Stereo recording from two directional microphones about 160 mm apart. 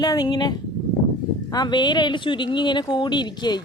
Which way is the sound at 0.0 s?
25° left (ahead or behind).